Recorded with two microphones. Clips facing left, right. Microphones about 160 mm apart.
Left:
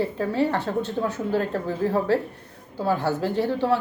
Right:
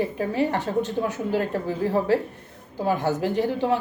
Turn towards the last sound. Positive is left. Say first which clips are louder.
# even
turn(degrees=-15)  # may be behind; listen again after turning